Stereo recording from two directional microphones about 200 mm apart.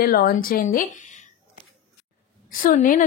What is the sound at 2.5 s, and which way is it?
Speech, 40° left (ahead or behind).